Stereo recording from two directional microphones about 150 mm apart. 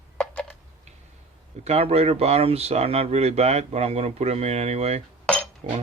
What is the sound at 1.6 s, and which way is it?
A man's voice, 45° right (ahead or behind).